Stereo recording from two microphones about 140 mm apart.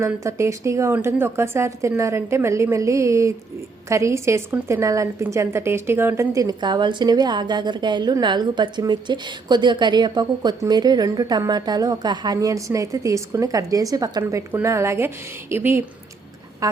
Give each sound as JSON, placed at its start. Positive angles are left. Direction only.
{"t": 0.2, "sound": "a woman's voice", "side_deg": -20}